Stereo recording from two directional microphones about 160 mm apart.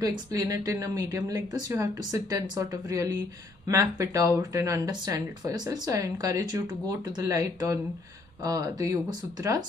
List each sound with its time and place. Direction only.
0.0 s speech: 25° right (ahead or behind)